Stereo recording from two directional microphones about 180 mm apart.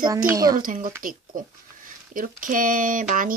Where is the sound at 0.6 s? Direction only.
50° right (ahead or behind).